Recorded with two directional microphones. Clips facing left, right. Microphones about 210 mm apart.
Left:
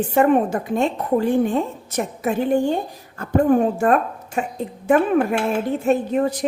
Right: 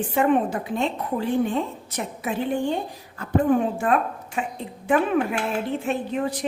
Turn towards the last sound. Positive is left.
turn(degrees=45)  # may be behind; listen again after turning